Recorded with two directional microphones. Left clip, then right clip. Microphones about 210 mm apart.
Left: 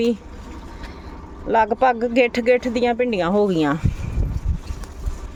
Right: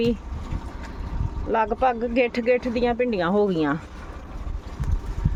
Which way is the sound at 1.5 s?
20° left (ahead or behind).